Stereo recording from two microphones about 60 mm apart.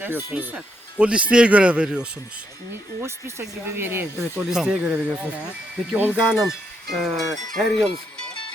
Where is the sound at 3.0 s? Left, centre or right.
Right.